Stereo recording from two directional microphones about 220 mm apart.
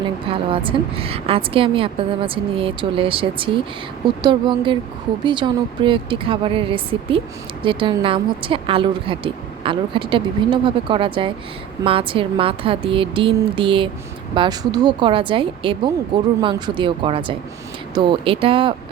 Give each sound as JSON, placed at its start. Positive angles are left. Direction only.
{"t": 0.3, "sound": "a woman's voice", "side_deg": -25}